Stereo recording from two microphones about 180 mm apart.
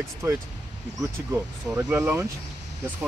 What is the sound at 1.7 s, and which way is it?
Speech, 15° right (ahead or behind).